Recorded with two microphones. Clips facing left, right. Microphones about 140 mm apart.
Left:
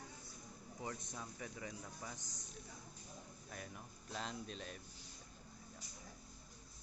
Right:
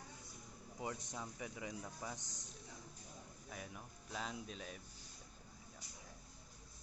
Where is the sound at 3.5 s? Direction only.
5° right (ahead or behind).